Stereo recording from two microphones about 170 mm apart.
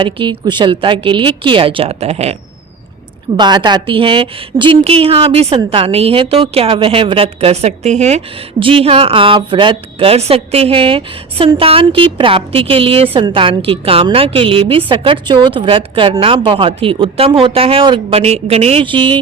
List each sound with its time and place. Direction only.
0.0 s a woman's voice: 30° right (ahead or behind)
3.3 s a woman's voice: 25° right (ahead or behind)